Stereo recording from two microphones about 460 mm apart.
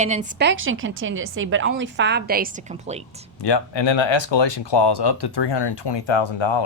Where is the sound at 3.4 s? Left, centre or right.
Left.